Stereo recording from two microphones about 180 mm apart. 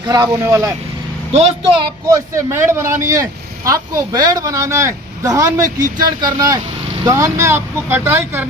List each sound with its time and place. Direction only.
0.0 s a man's voice: 20° right (ahead or behind)
2.0 s a man's voice: 15° right (ahead or behind)